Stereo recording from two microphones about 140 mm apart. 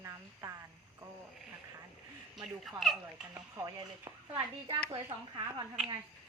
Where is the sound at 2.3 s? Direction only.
Centre (ahead or behind).